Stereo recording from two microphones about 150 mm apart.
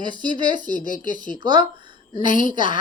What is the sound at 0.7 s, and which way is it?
Speech, 60° left (ahead or behind).